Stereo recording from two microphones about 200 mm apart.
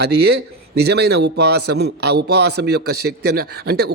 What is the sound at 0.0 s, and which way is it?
A man's voice, 55° right (ahead or behind).